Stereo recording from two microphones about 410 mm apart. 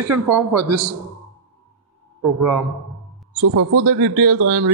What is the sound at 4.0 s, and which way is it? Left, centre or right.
Speech, right.